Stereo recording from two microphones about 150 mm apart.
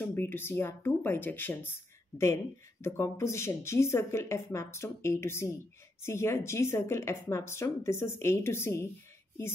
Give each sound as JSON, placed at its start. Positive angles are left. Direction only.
{"t": 0.0, "sound": "speech", "side_deg": 15}